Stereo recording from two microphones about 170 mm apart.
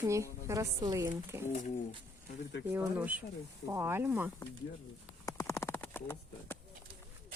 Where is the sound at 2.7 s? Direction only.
10° right (ahead or behind).